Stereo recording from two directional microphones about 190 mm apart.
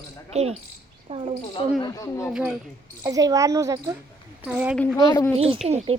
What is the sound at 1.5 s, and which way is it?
Speech, 20° left (ahead or behind).